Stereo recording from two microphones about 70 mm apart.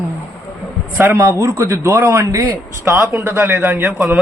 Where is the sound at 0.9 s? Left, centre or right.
Right.